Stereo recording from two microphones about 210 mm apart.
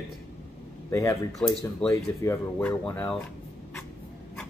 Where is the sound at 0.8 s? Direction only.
15° left (ahead or behind).